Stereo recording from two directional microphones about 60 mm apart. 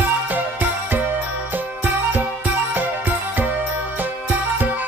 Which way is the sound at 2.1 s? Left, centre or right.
Right.